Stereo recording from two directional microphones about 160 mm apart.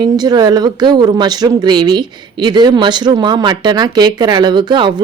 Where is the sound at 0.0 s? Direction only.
25° right (ahead or behind).